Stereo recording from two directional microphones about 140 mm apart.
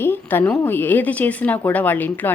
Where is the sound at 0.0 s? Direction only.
15° left (ahead or behind).